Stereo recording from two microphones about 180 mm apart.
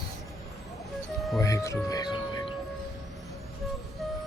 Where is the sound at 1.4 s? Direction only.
15° left (ahead or behind).